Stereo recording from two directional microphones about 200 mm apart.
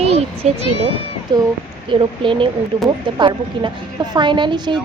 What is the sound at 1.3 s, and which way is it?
A woman's voice, 20° right (ahead or behind).